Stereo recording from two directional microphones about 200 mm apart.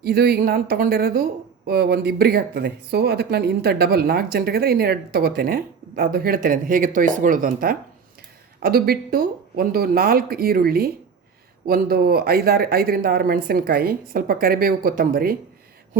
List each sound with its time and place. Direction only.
0.0 s a woman's voice: 50° right (ahead or behind)